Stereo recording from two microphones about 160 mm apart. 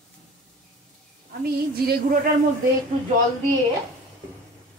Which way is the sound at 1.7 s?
75° right (ahead or behind).